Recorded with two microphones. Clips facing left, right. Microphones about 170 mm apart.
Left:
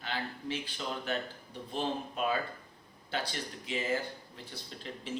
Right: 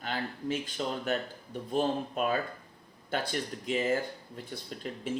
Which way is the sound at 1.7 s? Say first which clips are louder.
Right 5 dB; 45° right (ahead or behind).